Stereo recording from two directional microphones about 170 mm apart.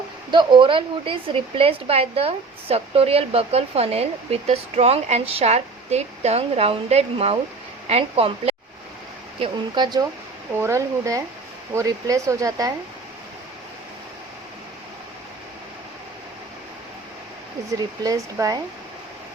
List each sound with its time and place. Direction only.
0.3 s speech: 30° right (ahead or behind)
18.0 s speech: 20° right (ahead or behind)